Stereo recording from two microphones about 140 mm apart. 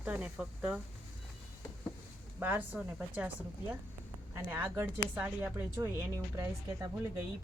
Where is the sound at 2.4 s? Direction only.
10° right (ahead or behind).